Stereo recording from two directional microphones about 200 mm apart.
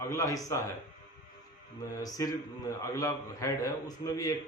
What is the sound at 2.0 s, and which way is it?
A man's voice, 20° left (ahead or behind).